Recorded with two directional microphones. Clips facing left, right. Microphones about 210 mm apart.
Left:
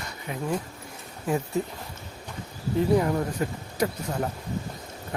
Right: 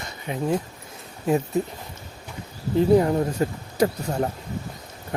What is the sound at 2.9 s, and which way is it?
Speech, 25° right (ahead or behind).